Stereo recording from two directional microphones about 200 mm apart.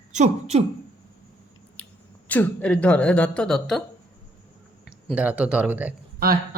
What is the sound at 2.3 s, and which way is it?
A woman's voice, 10° left (ahead or behind).